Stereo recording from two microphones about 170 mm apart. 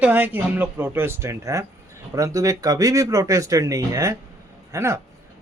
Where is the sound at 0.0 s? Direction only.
10° right (ahead or behind).